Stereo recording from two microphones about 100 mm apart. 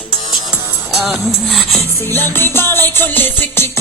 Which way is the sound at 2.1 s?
20° left (ahead or behind).